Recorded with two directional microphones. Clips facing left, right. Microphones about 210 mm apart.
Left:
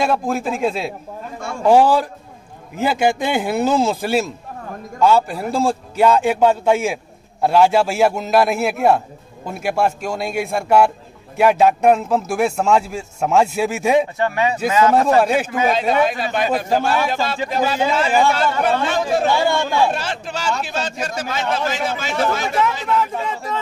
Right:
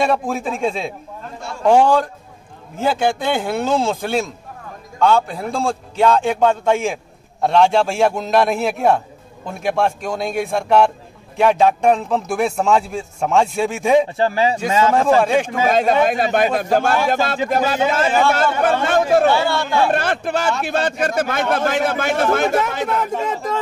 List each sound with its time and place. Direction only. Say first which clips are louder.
0.0 s a man's voice: even; centre (ahead or behind)
14.1 s speech: right 2 dB; 30° right (ahead or behind)
15.1 s a man's voice: even; 5° left (ahead or behind)
15.7 s speech: right 4 dB; 50° right (ahead or behind)
19.4 s a man's voice: left 2 dB; 15° left (ahead or behind)
19.9 s a man's voice: right 5 dB; 55° right (ahead or behind)